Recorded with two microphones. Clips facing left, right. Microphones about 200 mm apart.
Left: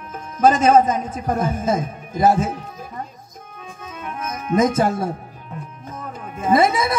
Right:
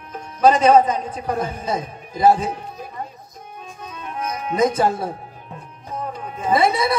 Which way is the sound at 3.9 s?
45° left (ahead or behind).